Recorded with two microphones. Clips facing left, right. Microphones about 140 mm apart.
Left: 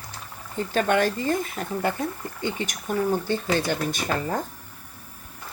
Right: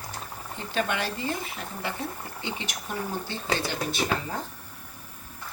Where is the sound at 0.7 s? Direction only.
50° left (ahead or behind).